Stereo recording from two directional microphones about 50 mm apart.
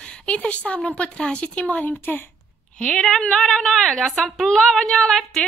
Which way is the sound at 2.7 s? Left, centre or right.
Left.